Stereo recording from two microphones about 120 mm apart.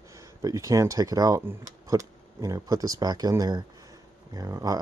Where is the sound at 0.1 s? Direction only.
25° right (ahead or behind).